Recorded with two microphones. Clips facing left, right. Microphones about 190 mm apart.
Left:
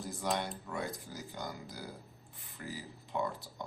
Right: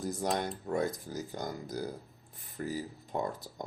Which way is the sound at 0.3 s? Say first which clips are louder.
Right 6 dB; 45° right (ahead or behind).